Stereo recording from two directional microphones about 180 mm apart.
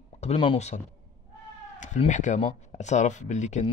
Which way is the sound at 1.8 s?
40° left (ahead or behind).